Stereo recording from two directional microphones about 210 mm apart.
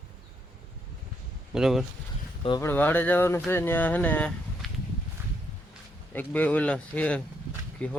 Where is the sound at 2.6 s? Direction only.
10° left (ahead or behind).